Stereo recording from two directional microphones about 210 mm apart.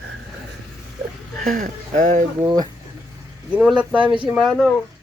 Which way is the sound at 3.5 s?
5° right (ahead or behind).